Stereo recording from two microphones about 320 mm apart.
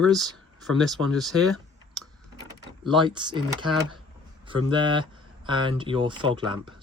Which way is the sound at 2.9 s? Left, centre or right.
Centre.